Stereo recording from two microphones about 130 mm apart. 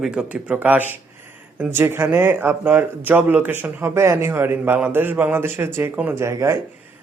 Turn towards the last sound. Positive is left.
turn(degrees=-20)  # may be behind; listen again after turning